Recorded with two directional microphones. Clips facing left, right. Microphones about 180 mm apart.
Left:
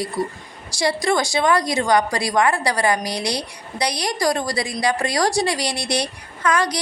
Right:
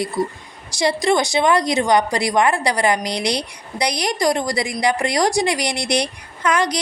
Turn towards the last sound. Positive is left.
turn(degrees=-20)  # may be behind; listen again after turning